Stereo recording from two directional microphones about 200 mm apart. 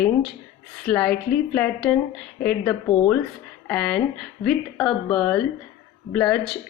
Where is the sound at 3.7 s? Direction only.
5° left (ahead or behind).